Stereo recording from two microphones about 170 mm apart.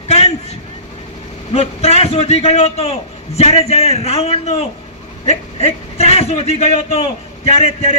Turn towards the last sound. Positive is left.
turn(degrees=35)  # may be behind; listen again after turning